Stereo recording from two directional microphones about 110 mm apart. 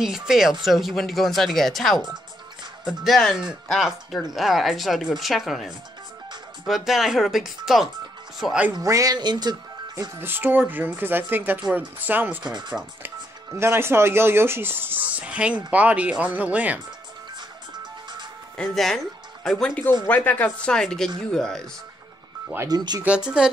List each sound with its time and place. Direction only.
0.0 s speech: 5° right (ahead or behind)
8.7 s speech: 30° right (ahead or behind)
10.1 s speech: 20° right (ahead or behind)
12.4 s speech: 40° right (ahead or behind)
13.0 s speech: 25° right (ahead or behind)
18.6 s speech: 5° left (ahead or behind)
22.7 s speech: 40° right (ahead or behind)
23.0 s speech: 10° right (ahead or behind)